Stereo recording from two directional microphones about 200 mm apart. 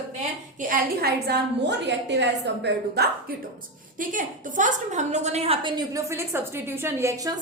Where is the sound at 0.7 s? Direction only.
55° right (ahead or behind).